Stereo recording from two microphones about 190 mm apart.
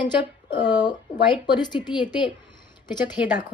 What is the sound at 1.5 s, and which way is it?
Speech, 25° left (ahead or behind).